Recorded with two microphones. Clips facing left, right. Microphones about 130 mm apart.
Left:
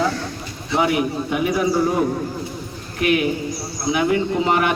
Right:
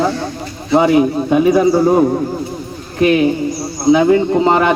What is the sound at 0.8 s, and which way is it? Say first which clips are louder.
A man's voice: right 7 dB; 30° right (ahead or behind).